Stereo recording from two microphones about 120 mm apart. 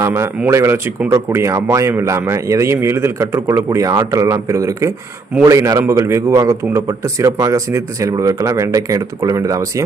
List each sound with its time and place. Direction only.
0.0 s speech: 20° right (ahead or behind)